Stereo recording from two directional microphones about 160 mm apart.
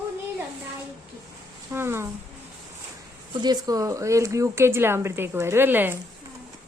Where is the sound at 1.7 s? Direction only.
15° right (ahead or behind).